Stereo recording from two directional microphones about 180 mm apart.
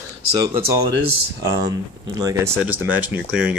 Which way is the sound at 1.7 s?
15° right (ahead or behind).